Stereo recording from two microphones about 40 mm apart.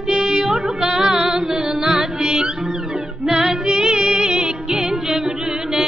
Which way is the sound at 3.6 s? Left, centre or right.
Centre.